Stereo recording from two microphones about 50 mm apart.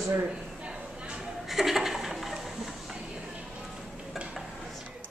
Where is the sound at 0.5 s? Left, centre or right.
Centre.